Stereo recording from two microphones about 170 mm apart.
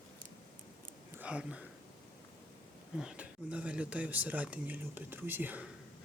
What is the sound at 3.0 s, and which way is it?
Speech, 5° right (ahead or behind).